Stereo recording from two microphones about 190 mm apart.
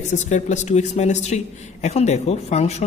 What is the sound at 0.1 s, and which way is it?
Speech, 40° left (ahead or behind).